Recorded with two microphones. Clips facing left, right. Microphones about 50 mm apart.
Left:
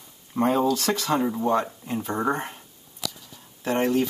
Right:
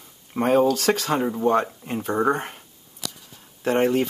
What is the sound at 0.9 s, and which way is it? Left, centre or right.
Speech, right.